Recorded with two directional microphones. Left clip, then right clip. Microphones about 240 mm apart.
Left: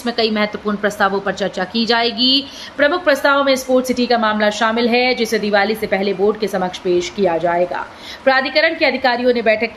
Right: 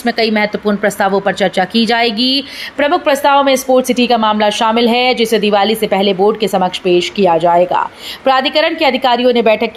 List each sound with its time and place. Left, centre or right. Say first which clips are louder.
0.0 s speech: right 4 dB; right